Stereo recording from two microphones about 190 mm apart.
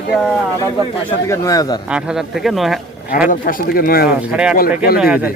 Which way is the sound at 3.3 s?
45° left (ahead or behind).